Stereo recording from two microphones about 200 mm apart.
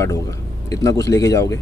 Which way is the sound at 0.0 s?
15° left (ahead or behind).